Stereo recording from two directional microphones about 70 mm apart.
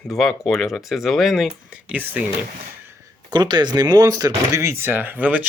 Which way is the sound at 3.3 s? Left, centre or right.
Right.